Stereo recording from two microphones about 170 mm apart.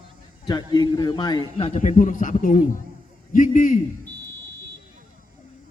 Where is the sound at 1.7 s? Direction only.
45° left (ahead or behind).